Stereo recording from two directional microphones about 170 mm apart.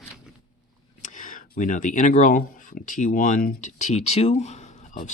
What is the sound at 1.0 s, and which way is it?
Speech, 50° left (ahead or behind).